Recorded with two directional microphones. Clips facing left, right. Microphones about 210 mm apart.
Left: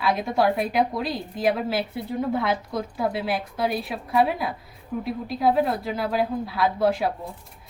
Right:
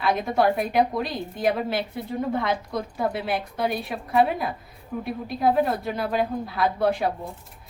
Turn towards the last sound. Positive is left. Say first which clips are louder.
# left 1 dB
turn(degrees=0)  # may be behind; listen again after turning